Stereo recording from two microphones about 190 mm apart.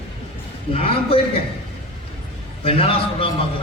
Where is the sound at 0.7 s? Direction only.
30° left (ahead or behind).